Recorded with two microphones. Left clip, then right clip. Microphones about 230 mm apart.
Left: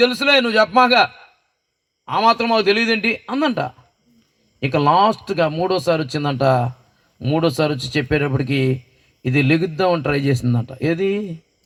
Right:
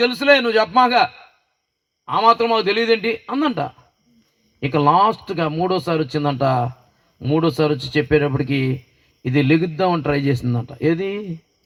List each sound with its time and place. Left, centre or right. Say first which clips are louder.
0.0 s a man's voice: even; left